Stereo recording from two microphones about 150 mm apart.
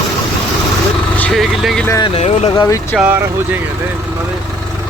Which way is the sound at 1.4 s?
Centre (ahead or behind).